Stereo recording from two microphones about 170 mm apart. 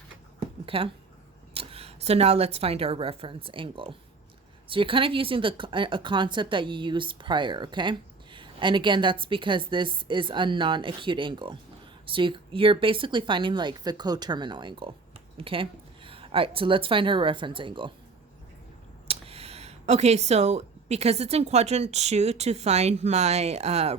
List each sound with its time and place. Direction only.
0.3 s a sound: 30° right (ahead or behind)
1.5 s a woman's voice: 35° right (ahead or behind)
19.0 s speech: 35° right (ahead or behind)